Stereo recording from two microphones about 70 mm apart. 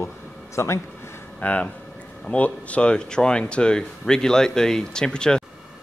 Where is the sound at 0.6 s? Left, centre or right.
Left.